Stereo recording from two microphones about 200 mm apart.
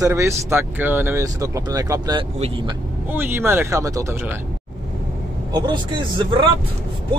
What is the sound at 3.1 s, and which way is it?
Speech, 10° right (ahead or behind).